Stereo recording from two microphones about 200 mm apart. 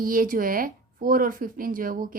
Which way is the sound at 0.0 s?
45° right (ahead or behind).